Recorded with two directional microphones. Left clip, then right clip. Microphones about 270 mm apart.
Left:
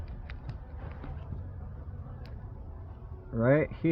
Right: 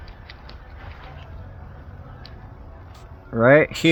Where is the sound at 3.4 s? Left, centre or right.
Right.